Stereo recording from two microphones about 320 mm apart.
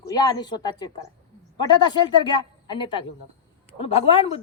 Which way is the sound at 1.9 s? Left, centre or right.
Centre.